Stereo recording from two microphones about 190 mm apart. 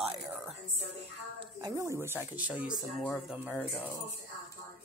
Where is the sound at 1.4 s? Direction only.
20° right (ahead or behind); by 3.3 s centre (ahead or behind).